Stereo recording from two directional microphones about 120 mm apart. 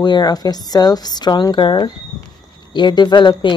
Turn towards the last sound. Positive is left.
turn(degrees=40)  # may be behind; listen again after turning